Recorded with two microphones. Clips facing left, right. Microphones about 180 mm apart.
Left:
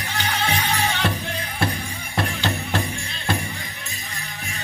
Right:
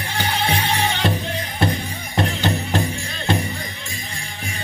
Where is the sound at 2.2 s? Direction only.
20° right (ahead or behind).